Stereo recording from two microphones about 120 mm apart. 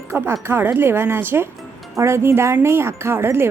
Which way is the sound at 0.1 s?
25° right (ahead or behind).